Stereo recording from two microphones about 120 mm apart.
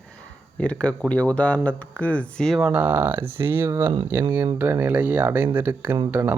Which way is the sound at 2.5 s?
5° right (ahead or behind).